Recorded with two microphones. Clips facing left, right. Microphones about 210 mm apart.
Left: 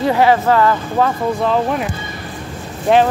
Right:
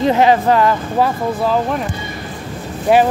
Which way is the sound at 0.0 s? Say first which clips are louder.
Right 1 dB; 20° right (ahead or behind).